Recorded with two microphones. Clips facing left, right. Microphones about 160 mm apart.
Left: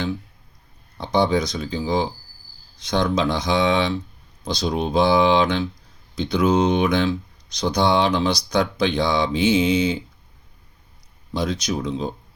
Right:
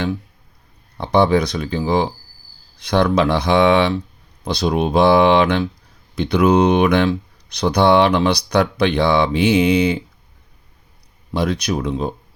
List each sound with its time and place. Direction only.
0.9 s speech: 60° right (ahead or behind)
11.3 s speech: 65° right (ahead or behind)